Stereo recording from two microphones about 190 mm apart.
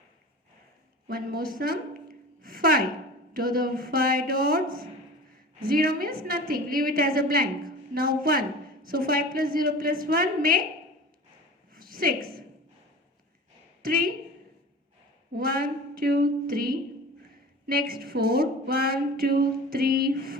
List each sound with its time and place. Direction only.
1.0 s a woman's voice: 50° right (ahead or behind)
2.4 s a sound: 50° right (ahead or behind)
3.3 s a woman's voice: 50° right (ahead or behind)
11.7 s a sound: 50° right (ahead or behind)
13.8 s a woman's voice: 50° right (ahead or behind)
15.3 s a woman's voice: 50° right (ahead or behind)